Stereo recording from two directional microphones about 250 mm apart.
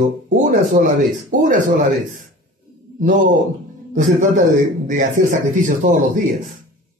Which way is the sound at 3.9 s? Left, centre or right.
Right.